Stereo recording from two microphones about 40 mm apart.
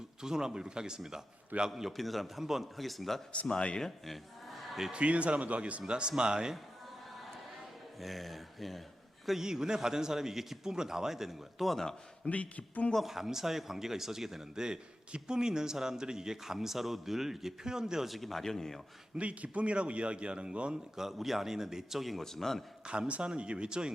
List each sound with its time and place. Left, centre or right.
0.2 s speech: centre
1.7 s a man's voice: centre
4.9 s a man's voice: right
5.9 s a man's voice: right
8.0 s a man's voice: centre
9.4 s speech: centre
12.2 s speech: left
13.0 s speech: centre
18.1 s speech: centre
19.1 s a man's voice: right
20.9 s speech: centre
22.2 s speech: centre
22.9 s a man's voice: right